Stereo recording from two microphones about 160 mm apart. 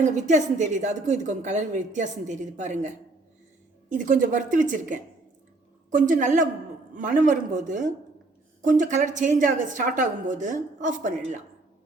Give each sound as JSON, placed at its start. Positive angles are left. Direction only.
{"t": 0.0, "sound": "a woman's voice", "side_deg": -50}